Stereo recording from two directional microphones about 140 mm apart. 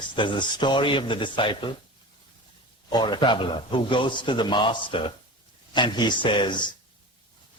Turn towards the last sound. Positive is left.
turn(degrees=35)  # may be behind; listen again after turning